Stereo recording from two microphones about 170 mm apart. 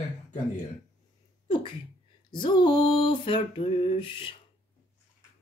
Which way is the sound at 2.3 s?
25° left (ahead or behind).